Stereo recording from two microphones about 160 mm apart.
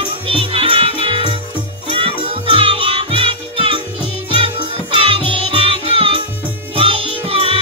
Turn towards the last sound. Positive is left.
turn(degrees=-35)  # may be behind; listen again after turning